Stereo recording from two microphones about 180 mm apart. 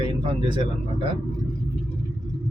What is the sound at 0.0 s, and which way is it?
Speech, 25° right (ahead or behind).